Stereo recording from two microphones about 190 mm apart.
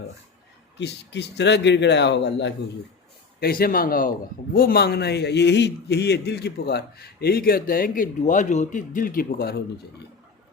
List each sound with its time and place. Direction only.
0.8 s a man's voice: 65° left (ahead or behind)
3.4 s a man's voice: 50° left (ahead or behind)